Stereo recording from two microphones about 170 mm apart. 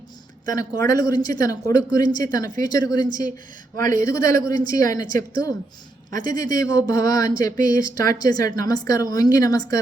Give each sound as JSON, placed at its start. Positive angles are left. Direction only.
{"t": 0.5, "sound": "speech", "side_deg": 20}
{"t": 3.8, "sound": "speech", "side_deg": -50}
{"t": 4.0, "sound": "speech", "side_deg": 20}
{"t": 7.5, "sound": "speech", "side_deg": -55}
{"t": 8.2, "sound": "speech", "side_deg": 20}